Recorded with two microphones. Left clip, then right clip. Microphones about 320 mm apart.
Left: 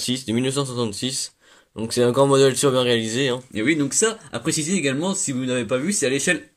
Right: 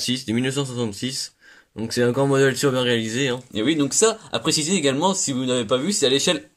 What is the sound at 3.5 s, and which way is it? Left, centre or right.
Speech, centre.